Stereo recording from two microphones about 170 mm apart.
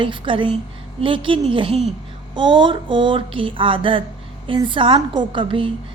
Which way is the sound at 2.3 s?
30° right (ahead or behind).